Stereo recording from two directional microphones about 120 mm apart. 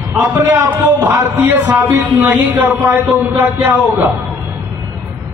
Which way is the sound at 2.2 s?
15° right (ahead or behind).